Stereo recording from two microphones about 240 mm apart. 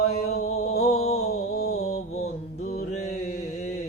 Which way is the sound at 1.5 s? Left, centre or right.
Left.